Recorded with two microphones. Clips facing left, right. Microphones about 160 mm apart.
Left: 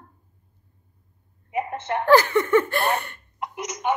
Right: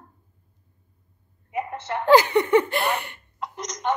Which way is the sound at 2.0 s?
15° right (ahead or behind).